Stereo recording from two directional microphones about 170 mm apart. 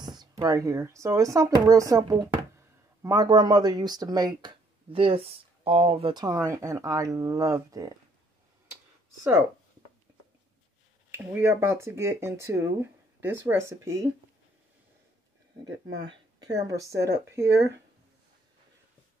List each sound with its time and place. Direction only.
0.0 s speech: 25° right (ahead or behind)
6.1 s speech: 20° right (ahead or behind)
11.1 s speech: 15° right (ahead or behind)
15.9 s speech: 90° right
16.6 s speech: 20° right (ahead or behind)